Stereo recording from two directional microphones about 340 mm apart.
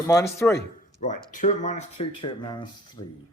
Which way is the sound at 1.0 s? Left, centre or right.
Left.